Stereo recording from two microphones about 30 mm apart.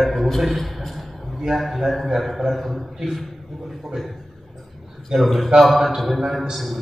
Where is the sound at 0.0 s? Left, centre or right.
Centre.